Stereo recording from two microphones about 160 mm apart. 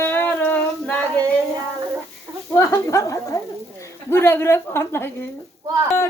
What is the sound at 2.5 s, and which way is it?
A woman's voice, 20° left (ahead or behind).